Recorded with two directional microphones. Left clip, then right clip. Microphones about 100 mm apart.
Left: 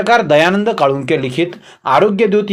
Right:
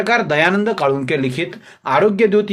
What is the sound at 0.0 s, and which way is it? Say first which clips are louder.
Speech: left 5 dB; 35° left (ahead or behind).